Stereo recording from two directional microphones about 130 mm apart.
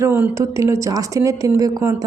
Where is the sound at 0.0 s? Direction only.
15° right (ahead or behind).